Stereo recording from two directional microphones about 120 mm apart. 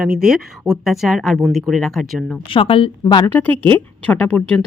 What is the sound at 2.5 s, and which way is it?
Speech, 45° left (ahead or behind).